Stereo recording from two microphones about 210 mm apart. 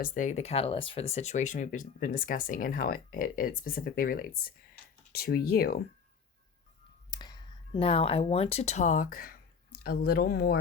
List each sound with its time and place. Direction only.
0.0 s speech: 40° left (ahead or behind)
7.1 s speech: 20° left (ahead or behind); by 10.6 s 45° left (ahead or behind)